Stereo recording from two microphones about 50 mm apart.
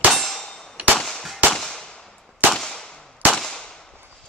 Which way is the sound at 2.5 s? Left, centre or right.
Centre.